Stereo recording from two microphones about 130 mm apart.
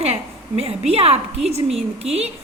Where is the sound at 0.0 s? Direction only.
55° right (ahead or behind).